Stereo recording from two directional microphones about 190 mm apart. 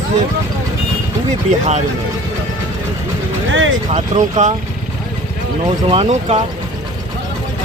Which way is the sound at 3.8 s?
35° right (ahead or behind).